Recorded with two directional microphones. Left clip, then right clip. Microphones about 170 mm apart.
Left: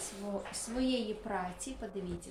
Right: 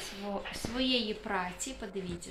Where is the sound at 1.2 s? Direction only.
20° right (ahead or behind).